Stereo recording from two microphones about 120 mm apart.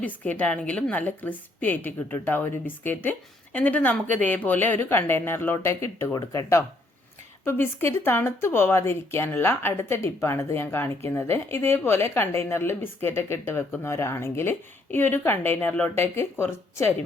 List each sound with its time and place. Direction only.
0.0 s a woman's voice: 10° left (ahead or behind)